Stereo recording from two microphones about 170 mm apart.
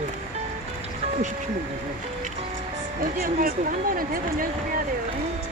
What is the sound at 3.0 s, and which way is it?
Speech, 55° right (ahead or behind).